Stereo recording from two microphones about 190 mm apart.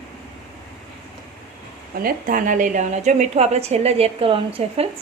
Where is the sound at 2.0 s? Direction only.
45° right (ahead or behind).